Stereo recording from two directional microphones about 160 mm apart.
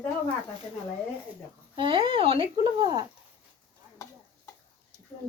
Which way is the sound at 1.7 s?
35° right (ahead or behind).